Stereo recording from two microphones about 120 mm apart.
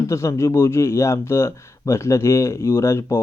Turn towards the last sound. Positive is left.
turn(degrees=25)  # may be behind; listen again after turning